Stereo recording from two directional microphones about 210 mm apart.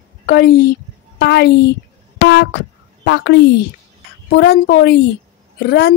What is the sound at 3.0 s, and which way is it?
A woman's voice, 55° left (ahead or behind).